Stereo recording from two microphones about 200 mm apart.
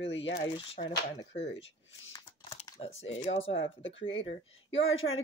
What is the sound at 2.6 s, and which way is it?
Speech, 30° left (ahead or behind).